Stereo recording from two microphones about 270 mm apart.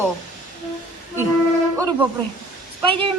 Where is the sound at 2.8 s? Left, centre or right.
Centre.